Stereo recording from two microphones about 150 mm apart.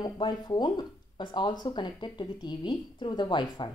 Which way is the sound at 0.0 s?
30° left (ahead or behind).